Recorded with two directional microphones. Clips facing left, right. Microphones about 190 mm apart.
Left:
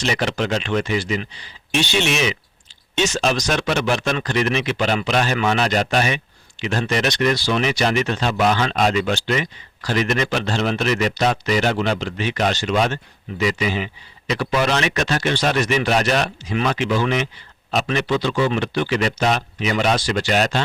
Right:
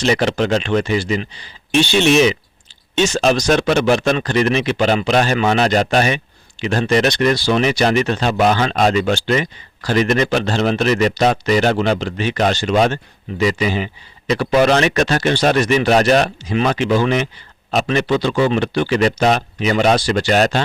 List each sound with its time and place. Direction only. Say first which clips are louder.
0.0 s speech: right 5 dB; 35° right (ahead or behind)